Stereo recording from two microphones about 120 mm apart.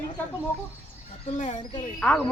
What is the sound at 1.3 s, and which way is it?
Speech, 80° left.